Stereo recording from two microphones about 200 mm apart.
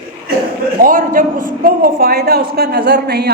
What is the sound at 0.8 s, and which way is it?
A man's voice, 45° right (ahead or behind).